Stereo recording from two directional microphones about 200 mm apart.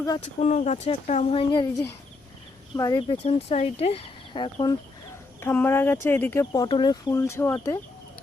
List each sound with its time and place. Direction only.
0.3 s speech: 35° left (ahead or behind)
2.7 s speech: 15° left (ahead or behind)
3.0 s speech: 30° left (ahead or behind)
5.4 s speech: 10° left (ahead or behind)